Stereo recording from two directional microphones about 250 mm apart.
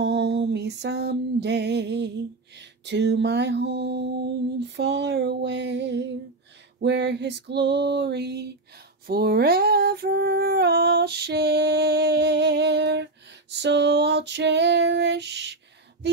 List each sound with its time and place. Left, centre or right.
0.0 s music: right
4.7 s a sound: right
9.0 s female singing: right